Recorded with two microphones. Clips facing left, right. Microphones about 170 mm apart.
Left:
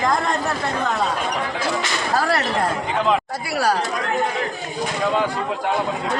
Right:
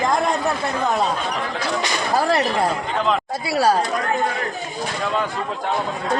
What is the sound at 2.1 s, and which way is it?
Speech, 15° right (ahead or behind).